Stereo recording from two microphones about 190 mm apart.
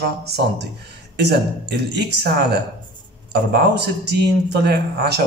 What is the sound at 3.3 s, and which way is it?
A man's voice, 60° right (ahead or behind).